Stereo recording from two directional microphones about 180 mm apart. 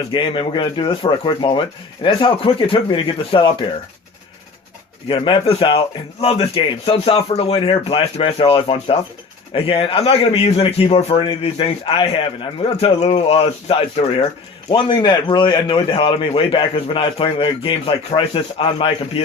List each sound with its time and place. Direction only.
0.1 s a man's voice: 30° left (ahead or behind)
5.0 s a man's voice: 30° left (ahead or behind)